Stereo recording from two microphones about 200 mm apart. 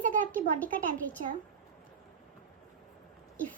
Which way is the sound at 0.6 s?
10° left (ahead or behind).